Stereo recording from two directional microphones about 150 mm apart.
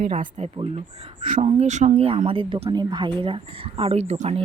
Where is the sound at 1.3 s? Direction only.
55° right (ahead or behind).